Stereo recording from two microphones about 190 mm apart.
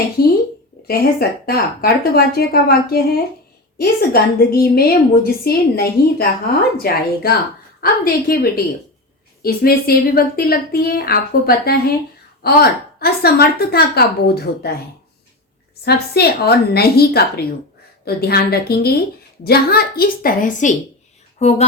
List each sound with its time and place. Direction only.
0.9 s a woman's voice: 50° left (ahead or behind)
15.8 s a woman's voice: 55° left (ahead or behind); by 21.7 s 35° left (ahead or behind)